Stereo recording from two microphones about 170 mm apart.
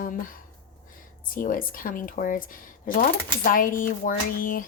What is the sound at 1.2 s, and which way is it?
Speech, 55° left (ahead or behind).